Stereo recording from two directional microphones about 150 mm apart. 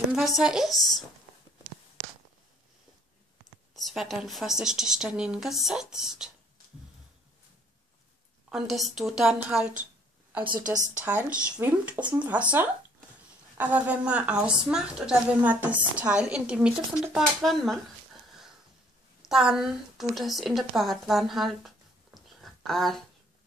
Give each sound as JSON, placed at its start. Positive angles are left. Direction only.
{"t": 0.1, "sound": "speech", "side_deg": -5}
{"t": 3.7, "sound": "a woman's voice", "side_deg": 0}
{"t": 8.5, "sound": "a woman's voice", "side_deg": 0}
{"t": 10.6, "sound": "a woman's voice", "side_deg": -55}
{"t": 11.1, "sound": "a woman's voice", "side_deg": -10}
{"t": 19.2, "sound": "speech", "side_deg": -5}